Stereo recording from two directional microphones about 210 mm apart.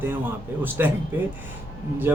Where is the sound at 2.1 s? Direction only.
10° right (ahead or behind).